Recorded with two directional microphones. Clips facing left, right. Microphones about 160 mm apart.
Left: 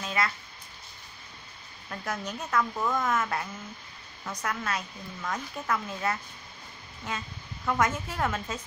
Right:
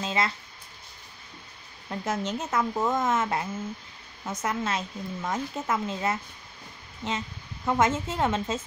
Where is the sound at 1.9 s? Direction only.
20° right (ahead or behind).